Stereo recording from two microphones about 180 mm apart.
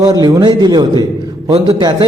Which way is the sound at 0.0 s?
20° right (ahead or behind).